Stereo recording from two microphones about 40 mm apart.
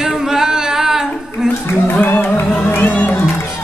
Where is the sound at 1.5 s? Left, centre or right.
Left.